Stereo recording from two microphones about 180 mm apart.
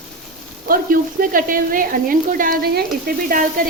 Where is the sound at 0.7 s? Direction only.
50° right (ahead or behind).